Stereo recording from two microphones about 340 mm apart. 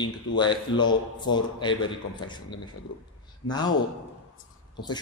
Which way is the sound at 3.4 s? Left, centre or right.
Left.